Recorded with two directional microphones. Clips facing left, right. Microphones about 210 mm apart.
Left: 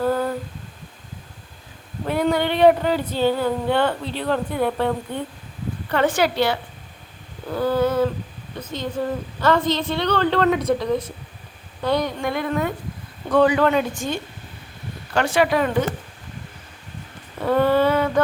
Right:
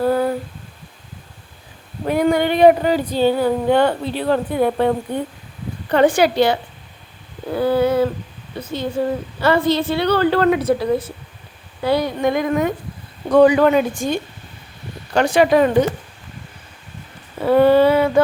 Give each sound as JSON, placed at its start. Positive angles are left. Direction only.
{"t": 0.0, "sound": "humming", "side_deg": -10}
{"t": 2.0, "sound": "a woman's voice", "side_deg": -10}
{"t": 17.4, "sound": "speech", "side_deg": -10}